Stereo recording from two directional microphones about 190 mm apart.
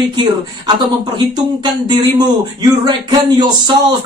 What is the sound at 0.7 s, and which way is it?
Speech, 20° right (ahead or behind).